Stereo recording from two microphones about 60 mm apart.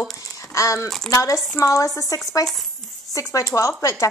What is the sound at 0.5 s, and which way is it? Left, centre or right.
Speech, left.